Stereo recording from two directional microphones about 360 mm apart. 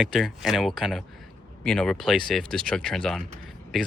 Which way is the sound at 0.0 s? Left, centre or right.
Centre.